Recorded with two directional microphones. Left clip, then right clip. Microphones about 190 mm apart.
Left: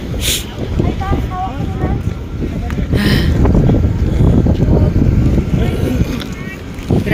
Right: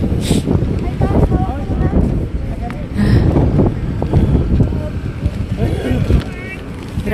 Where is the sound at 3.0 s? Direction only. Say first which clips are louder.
Left 2 dB; 10° right (ahead or behind).